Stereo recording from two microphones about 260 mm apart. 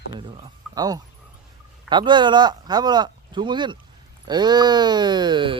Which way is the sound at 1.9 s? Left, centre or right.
Centre.